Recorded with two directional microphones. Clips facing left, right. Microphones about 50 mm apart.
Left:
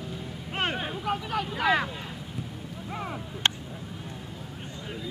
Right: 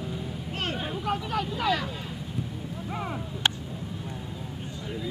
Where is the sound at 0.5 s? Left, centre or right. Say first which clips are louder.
Left 3 dB; left.